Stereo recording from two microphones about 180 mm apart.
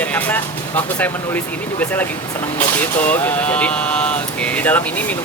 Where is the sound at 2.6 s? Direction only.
10° left (ahead or behind).